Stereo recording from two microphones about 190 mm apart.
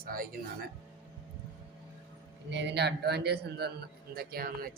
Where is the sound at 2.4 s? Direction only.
70° right (ahead or behind); by 4.7 s 50° right (ahead or behind).